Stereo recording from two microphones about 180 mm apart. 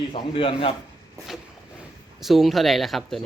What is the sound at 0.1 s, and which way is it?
Speech, 30° left (ahead or behind).